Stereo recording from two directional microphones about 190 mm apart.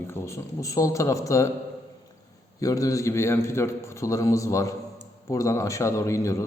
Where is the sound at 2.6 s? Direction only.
20° left (ahead or behind).